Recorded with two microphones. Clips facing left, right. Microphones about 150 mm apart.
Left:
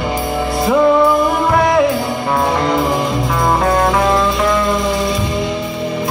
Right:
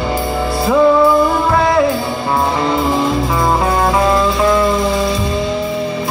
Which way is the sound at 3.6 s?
Centre (ahead or behind).